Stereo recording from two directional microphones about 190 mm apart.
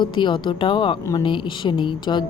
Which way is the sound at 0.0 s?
25° left (ahead or behind).